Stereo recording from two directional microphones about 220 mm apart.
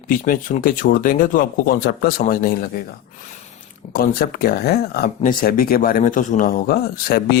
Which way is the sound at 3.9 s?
40° left (ahead or behind).